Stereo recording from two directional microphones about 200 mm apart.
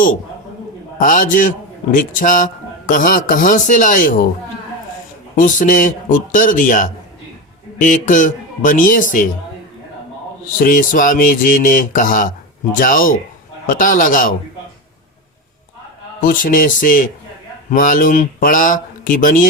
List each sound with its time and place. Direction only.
0.9 s a man's voice: 40° left (ahead or behind)
5.4 s a man's voice: 40° left (ahead or behind)
10.6 s a man's voice: 45° left (ahead or behind)
16.2 s a man's voice: 45° left (ahead or behind)